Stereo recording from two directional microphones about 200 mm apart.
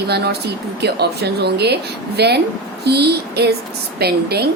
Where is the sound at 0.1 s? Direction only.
55° right (ahead or behind).